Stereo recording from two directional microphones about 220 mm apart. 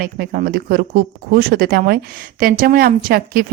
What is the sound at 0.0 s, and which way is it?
Speech, 40° right (ahead or behind).